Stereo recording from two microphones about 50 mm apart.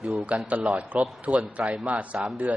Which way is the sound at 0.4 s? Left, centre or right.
Right.